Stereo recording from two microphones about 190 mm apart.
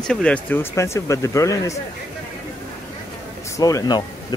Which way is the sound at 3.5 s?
20° left (ahead or behind).